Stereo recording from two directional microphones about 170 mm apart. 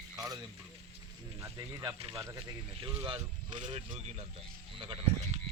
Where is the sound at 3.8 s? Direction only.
35° right (ahead or behind).